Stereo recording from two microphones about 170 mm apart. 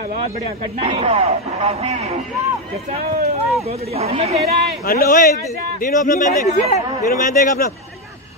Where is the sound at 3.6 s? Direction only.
35° right (ahead or behind).